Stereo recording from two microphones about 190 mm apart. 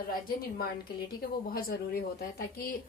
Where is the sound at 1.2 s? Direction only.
50° left (ahead or behind).